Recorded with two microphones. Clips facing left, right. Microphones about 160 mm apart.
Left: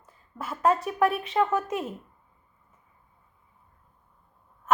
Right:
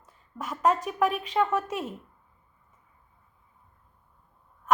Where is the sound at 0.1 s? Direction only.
5° left (ahead or behind).